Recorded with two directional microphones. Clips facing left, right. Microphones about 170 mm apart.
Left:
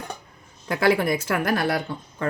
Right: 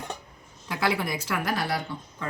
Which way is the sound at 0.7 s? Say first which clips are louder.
Left 7 dB; 55° left (ahead or behind).